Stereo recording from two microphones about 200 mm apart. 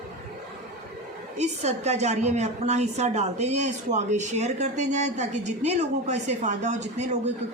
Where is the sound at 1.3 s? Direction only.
35° right (ahead or behind).